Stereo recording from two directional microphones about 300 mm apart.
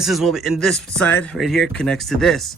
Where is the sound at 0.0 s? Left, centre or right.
Centre.